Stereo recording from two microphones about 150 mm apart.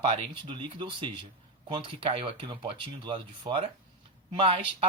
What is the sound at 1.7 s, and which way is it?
Speech, 35° right (ahead or behind).